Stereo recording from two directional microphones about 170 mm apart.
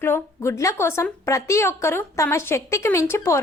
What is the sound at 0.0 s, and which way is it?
A woman's voice, 15° left (ahead or behind).